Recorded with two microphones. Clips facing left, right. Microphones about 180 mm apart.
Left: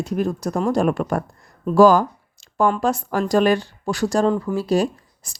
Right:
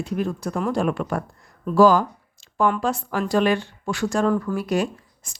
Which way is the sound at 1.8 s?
45° left (ahead or behind).